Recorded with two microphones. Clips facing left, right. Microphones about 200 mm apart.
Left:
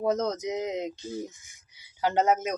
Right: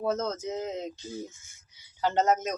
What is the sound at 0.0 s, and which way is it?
Speech, 15° left (ahead or behind).